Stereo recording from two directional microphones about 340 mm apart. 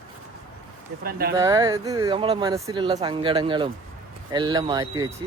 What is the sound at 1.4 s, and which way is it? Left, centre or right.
Speech, centre.